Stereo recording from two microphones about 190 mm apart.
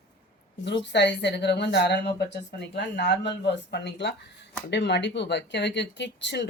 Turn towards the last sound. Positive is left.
turn(degrees=65)  # may be behind; listen again after turning